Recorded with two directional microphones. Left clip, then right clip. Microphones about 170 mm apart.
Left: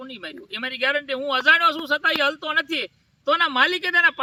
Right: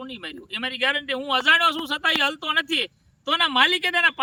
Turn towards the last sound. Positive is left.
turn(degrees=-45)  # may be behind; listen again after turning